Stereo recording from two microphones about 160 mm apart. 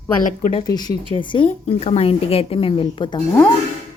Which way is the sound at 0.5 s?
25° left (ahead or behind).